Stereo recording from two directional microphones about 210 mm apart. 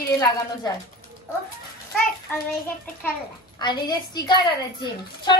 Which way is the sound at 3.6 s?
20° left (ahead or behind).